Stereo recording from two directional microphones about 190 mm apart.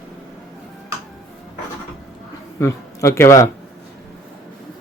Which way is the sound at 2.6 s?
15° left (ahead or behind).